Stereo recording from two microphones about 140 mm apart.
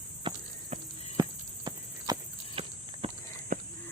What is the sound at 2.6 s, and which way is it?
Walk, 40° right (ahead or behind).